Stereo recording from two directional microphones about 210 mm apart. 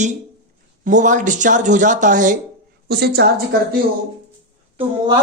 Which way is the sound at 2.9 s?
50° right (ahead or behind).